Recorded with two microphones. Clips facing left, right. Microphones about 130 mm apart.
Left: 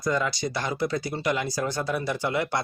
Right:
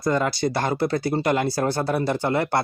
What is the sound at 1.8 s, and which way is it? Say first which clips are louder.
Speech: right 4 dB; 30° right (ahead or behind).